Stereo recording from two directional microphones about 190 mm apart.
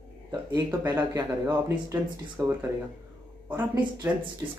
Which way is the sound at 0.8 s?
10° right (ahead or behind).